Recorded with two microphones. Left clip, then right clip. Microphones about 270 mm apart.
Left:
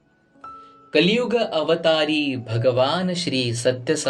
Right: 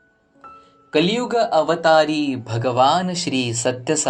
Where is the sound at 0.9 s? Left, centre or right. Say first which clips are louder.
Even; right.